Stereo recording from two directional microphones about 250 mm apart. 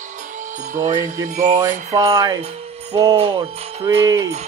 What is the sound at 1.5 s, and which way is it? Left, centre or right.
Jingle bell, centre.